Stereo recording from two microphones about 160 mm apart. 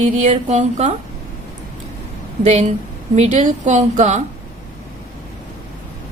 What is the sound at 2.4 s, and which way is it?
Speech, 45° right (ahead or behind).